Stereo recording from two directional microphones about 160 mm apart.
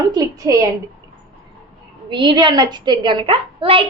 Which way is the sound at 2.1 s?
30° right (ahead or behind).